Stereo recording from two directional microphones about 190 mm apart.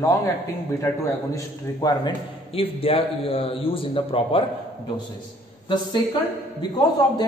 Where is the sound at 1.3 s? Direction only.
20° left (ahead or behind).